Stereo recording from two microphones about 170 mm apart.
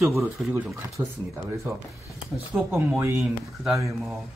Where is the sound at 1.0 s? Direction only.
20° right (ahead or behind).